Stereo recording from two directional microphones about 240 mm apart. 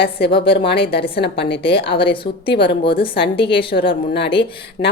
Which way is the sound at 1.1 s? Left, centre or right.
Left.